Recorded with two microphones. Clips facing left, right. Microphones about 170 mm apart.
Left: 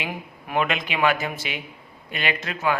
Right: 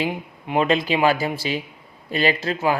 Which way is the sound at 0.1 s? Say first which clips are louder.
Right 3 dB; 25° right (ahead or behind).